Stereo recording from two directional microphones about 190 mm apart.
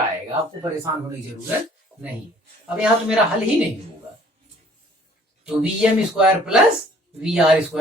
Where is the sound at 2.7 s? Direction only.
5° right (ahead or behind).